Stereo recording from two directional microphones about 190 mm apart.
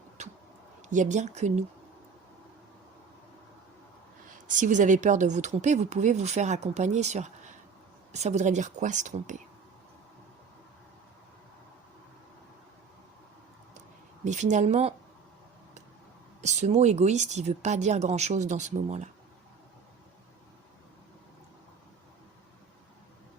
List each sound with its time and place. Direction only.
0.2 s a sound: 35° right (ahead or behind)
0.8 s speech: 40° right (ahead or behind)
4.4 s speech: 40° right (ahead or behind)
14.3 s speech: 40° right (ahead or behind)
16.4 s speech: 35° right (ahead or behind)